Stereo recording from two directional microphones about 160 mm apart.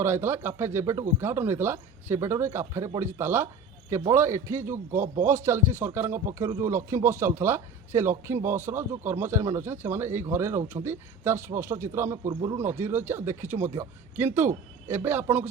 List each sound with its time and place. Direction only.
0.0 s speech: 15° right (ahead or behind)